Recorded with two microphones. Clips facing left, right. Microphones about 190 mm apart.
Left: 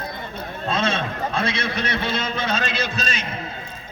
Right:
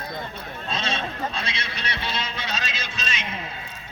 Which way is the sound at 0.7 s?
50° left (ahead or behind).